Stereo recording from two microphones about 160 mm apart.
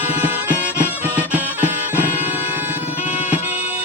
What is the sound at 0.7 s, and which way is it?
Music, 10° right (ahead or behind).